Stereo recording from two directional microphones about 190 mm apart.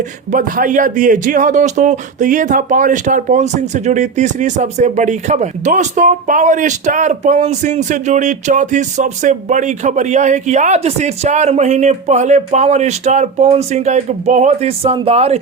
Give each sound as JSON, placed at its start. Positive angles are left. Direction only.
{"t": 0.3, "sound": "speech", "side_deg": -45}